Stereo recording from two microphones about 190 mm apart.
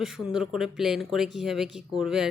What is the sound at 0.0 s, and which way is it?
A woman's voice, centre (ahead or behind).